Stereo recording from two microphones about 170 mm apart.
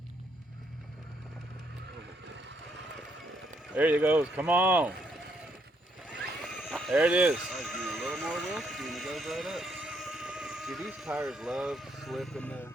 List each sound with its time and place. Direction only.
2.2 s vehicle: 90° right
3.8 s speech: 10° right (ahead or behind)
6.6 s speech: centre (ahead or behind)